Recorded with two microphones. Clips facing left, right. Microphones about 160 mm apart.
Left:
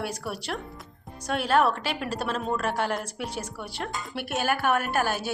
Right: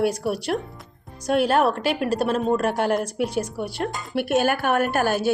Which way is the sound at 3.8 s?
55° right (ahead or behind).